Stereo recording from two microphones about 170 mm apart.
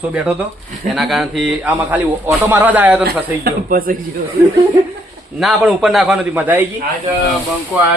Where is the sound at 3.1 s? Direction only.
60° right (ahead or behind).